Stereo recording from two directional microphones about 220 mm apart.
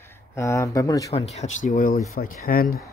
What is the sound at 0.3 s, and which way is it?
Speech, 15° left (ahead or behind).